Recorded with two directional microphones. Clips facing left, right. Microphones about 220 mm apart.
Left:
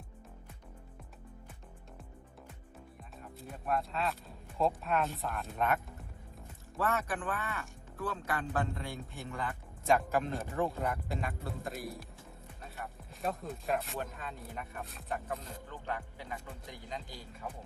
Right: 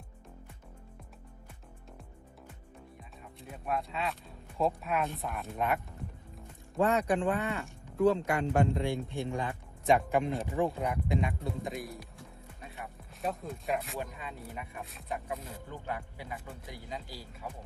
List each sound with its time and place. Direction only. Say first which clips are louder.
3.0 s speech: left 1 dB; centre (ahead or behind)
6.7 s speech: right 6 dB; 15° right (ahead or behind)
7.2 s speech: right 7 dB; 25° right (ahead or behind)
9.8 s speech: right 3 dB; centre (ahead or behind)